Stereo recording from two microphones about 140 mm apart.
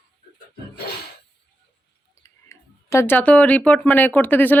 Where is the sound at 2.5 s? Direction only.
20° left (ahead or behind).